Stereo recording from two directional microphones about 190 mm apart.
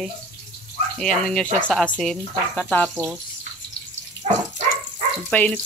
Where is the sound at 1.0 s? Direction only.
5° left (ahead or behind).